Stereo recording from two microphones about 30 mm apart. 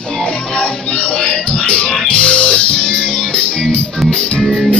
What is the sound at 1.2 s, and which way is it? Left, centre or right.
Music, left.